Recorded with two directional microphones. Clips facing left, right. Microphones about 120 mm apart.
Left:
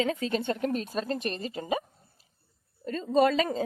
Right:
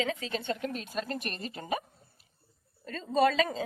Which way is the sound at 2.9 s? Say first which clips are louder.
Left 3 dB; 35° left (ahead or behind).